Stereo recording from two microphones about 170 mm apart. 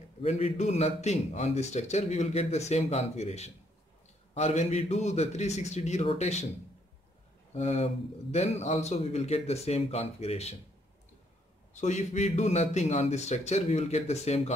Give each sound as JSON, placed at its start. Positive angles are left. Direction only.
{"t": 0.2, "sound": "a man's voice", "side_deg": 35}
{"t": 7.5, "sound": "a man's voice", "side_deg": 40}
{"t": 11.7, "sound": "a man's voice", "side_deg": 45}